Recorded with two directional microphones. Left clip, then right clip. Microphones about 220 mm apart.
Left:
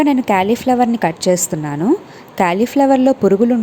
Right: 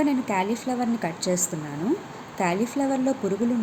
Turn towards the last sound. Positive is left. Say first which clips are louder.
# left 13 dB
turn(degrees=40)  # may be behind; listen again after turning